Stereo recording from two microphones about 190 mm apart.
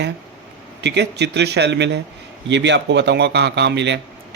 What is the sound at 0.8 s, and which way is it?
A man's voice, 65° right (ahead or behind).